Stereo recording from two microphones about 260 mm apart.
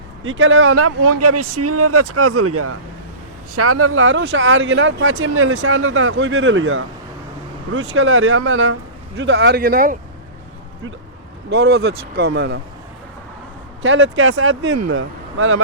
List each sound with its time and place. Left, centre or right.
0.3 s speech: right
11.4 s speech: right
13.8 s speech: right